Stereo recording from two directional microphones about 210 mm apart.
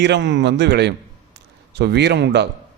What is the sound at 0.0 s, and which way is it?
Speech, 55° right (ahead or behind).